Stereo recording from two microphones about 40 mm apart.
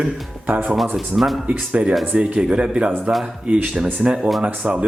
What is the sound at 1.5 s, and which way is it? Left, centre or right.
Speech, right.